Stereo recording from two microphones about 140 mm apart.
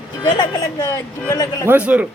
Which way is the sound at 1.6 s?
10° right (ahead or behind).